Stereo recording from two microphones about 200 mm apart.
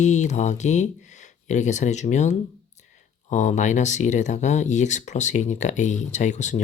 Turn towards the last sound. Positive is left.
turn(degrees=35)  # may be behind; listen again after turning